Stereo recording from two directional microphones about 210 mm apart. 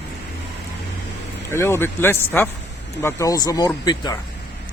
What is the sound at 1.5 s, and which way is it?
Speech, 10° left (ahead or behind).